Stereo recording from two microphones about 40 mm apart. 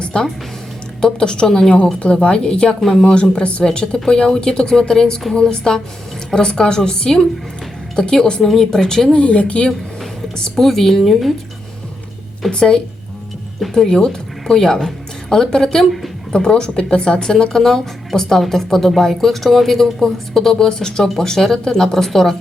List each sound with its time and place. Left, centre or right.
0.1 s speech: centre
3.6 s speech: centre
8.4 s speech: centre
9.1 s speech: left
10.5 s speech: centre
12.5 s speech: left
15.8 s speech: centre
16.3 s speech: left